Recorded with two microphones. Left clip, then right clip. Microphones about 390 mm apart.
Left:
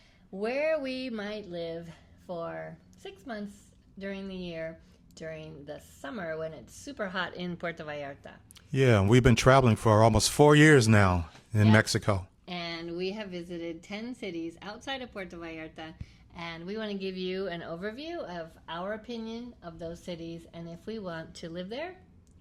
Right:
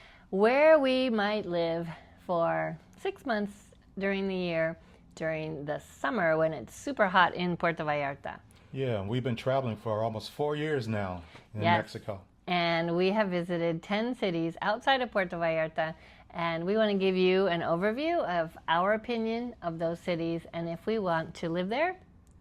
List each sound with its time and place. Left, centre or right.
0.3 s a woman's voice: right
8.7 s speech: left
12.5 s a sound: right
12.7 s a woman's voice: right
16.3 s speech: right
16.6 s a woman's voice: right